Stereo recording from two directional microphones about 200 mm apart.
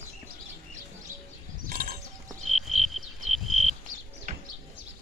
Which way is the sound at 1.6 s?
45° right (ahead or behind).